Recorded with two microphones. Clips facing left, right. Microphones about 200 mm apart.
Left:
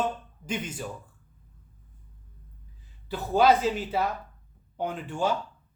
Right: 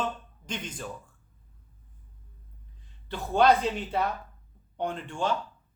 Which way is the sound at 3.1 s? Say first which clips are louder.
Left 1 dB; 5° left (ahead or behind).